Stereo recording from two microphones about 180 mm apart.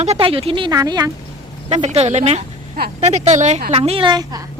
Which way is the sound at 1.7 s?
40° right (ahead or behind).